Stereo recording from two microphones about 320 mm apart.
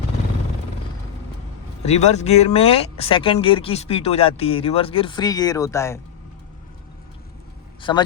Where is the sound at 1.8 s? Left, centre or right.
Left.